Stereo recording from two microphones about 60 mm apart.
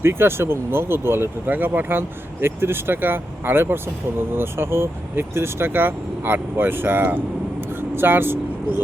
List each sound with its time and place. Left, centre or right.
0.0 s speech: right
7.7 s vehicle: right